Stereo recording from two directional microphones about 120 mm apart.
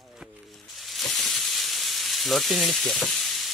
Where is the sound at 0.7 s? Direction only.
Centre (ahead or behind).